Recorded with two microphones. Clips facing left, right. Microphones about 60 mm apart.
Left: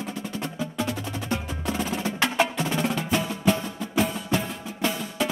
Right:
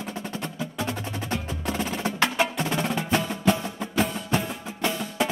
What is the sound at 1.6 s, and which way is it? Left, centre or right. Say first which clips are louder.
Percussion: left 1 dB; centre.